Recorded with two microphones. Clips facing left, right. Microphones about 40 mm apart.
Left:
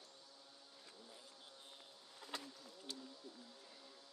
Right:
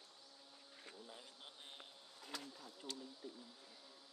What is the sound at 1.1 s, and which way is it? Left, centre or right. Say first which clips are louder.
Insect: right 2 dB; right.